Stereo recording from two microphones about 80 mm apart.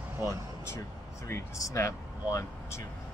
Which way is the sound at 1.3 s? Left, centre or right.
Left.